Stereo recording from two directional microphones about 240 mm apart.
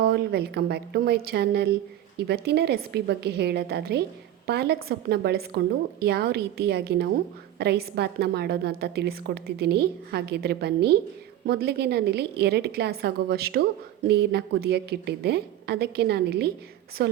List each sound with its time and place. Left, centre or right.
0.0 s a woman's voice: right